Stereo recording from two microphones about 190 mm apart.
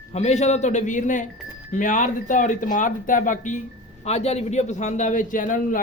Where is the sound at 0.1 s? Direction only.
35° left (ahead or behind).